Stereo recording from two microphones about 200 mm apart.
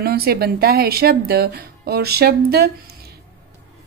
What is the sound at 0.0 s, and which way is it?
Speech, 50° right (ahead or behind).